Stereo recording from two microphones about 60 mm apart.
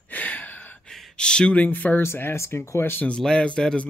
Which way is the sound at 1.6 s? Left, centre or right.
Left.